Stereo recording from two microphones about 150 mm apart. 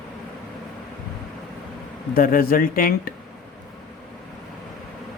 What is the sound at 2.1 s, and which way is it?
Speech, 75° left (ahead or behind).